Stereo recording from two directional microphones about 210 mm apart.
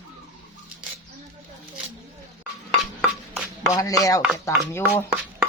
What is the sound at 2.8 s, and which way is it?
Stir, 5° right (ahead or behind).